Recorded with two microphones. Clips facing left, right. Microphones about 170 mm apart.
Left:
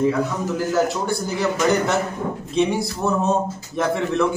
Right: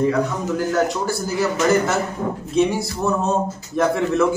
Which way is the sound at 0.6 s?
Centre (ahead or behind).